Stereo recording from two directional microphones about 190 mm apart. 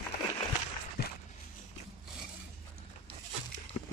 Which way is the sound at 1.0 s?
55° left (ahead or behind).